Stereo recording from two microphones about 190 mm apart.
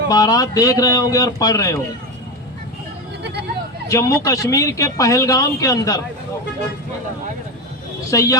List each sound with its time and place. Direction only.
0.1 s speech: 20° left (ahead or behind)
3.8 s speech: 15° left (ahead or behind)
8.1 s speech: 15° left (ahead or behind)